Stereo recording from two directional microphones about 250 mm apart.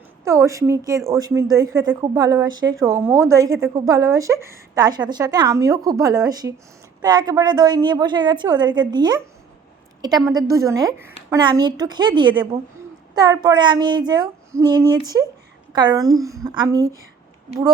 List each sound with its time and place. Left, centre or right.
0.3 s a woman's voice: centre
10.3 s a woman's voice: centre